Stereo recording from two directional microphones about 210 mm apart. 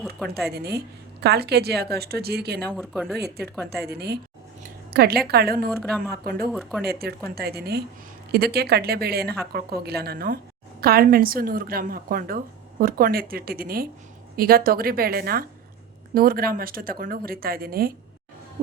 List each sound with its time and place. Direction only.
0.0 s a woman's voice: centre (ahead or behind)
0.5 s speech: 50° right (ahead or behind)
2.6 s speech: 5° left (ahead or behind)
3.2 s speech: 50° right (ahead or behind)
5.6 s speech: centre (ahead or behind)
6.2 s speech: 45° right (ahead or behind)
6.5 s speech: centre (ahead or behind)
6.8 s speech: 50° right (ahead or behind)